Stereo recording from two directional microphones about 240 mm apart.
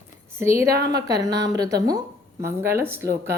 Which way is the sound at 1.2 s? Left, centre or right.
Centre.